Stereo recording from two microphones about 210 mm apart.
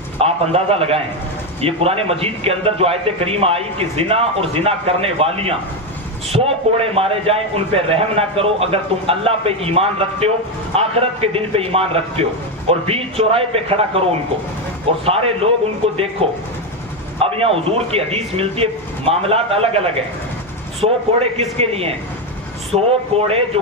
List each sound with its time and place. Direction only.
0.2 s a man's voice: 30° right (ahead or behind)
15.0 s speech: 30° right (ahead or behind)
17.2 s speech: 30° right (ahead or behind)